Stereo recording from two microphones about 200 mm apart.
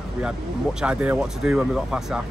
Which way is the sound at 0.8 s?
5° right (ahead or behind).